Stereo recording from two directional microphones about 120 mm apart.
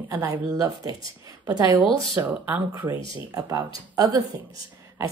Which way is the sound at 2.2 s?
15° right (ahead or behind).